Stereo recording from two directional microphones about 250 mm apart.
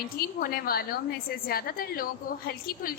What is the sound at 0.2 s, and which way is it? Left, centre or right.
A woman's voice, left.